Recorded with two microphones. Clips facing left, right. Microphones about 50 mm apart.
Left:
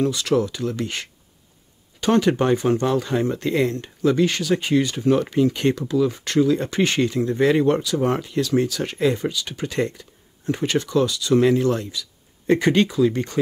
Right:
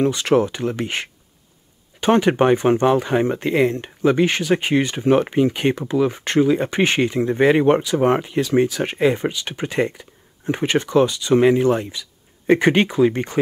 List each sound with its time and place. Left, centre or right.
0.0 s speech: right